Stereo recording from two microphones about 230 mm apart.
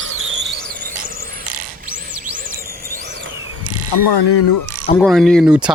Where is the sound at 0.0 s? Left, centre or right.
Right.